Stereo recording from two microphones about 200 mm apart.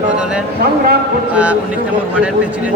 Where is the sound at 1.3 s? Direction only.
5° right (ahead or behind).